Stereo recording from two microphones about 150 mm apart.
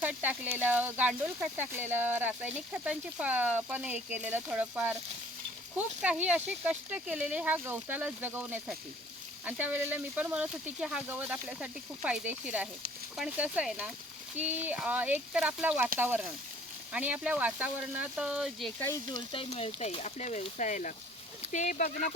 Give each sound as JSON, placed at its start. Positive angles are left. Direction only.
{"t": 0.0, "sound": "speech", "side_deg": -10}
{"t": 19.3, "sound": "speech", "side_deg": 40}